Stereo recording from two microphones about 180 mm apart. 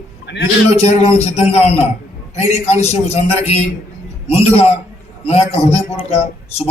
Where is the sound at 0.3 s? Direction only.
70° left (ahead or behind).